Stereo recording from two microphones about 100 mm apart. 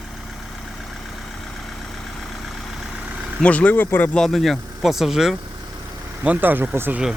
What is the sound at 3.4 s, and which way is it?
Speech, 15° left (ahead or behind).